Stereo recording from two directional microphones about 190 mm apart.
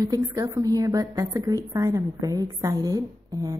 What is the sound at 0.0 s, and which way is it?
A woman's voice, 15° right (ahead or behind).